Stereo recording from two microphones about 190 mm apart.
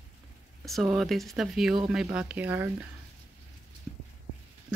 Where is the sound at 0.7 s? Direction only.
Centre (ahead or behind).